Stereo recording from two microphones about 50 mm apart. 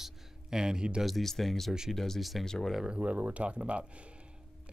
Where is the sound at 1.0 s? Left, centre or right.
Centre.